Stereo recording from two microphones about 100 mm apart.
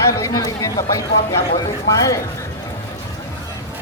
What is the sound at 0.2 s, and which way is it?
Speech, 35° left (ahead or behind).